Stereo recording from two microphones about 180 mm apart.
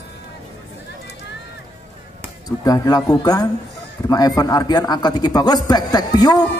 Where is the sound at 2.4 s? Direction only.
20° left (ahead or behind).